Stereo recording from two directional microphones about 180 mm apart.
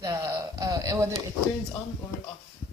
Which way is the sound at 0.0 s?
20° right (ahead or behind).